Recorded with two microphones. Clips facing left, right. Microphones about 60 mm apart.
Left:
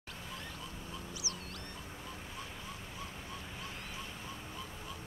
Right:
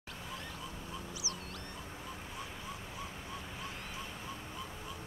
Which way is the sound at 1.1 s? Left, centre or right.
Centre.